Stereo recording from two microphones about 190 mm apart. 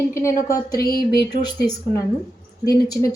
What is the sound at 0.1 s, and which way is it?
Speech, 15° left (ahead or behind).